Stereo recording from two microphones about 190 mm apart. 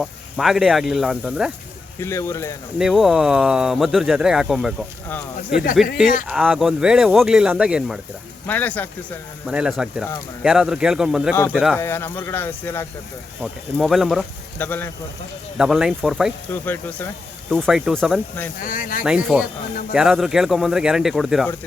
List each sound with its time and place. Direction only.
0.0 s speech: centre (ahead or behind)
2.0 s speech: 15° left (ahead or behind)
2.7 s speech: centre (ahead or behind)
8.4 s speech: 10° left (ahead or behind)
9.5 s speech: 5° right (ahead or behind)
11.3 s speech: 10° left (ahead or behind)
13.4 s speech: centre (ahead or behind)
14.6 s speech: 10° left (ahead or behind)
15.5 s speech: 5° right (ahead or behind)
16.5 s speech: 10° left (ahead or behind)
17.5 s speech: centre (ahead or behind)
18.6 s speech: 45° left (ahead or behind)
19.0 s speech: 5° right (ahead or behind)